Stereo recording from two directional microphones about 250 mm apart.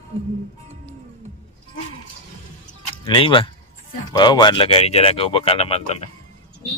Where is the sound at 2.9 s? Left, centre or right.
Left.